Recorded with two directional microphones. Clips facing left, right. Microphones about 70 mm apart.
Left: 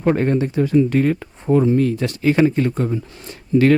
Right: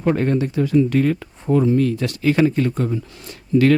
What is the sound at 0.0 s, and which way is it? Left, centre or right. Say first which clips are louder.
Speech: left 1 dB; left.